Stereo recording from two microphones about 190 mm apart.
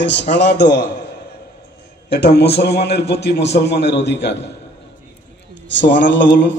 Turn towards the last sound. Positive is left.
turn(degrees=70)  # may be behind; listen again after turning